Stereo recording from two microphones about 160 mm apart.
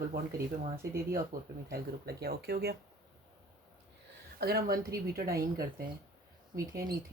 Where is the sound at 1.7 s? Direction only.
75° right (ahead or behind).